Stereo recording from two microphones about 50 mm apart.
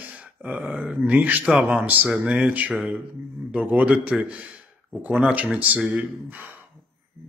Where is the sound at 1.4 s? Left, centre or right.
Centre.